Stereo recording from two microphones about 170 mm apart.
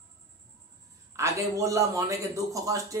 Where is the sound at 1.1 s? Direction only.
15° right (ahead or behind).